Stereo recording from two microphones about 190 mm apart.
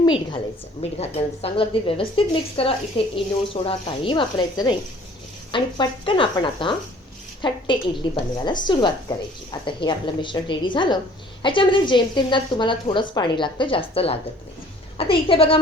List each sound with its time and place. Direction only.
0.0 s a woman's voice: 25° left (ahead or behind)